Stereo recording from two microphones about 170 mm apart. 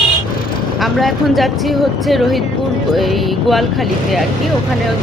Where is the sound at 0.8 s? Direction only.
Centre (ahead or behind).